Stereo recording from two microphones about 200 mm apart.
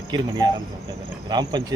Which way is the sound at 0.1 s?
20° right (ahead or behind).